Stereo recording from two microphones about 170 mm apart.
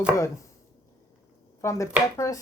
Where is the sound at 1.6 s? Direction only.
15° left (ahead or behind).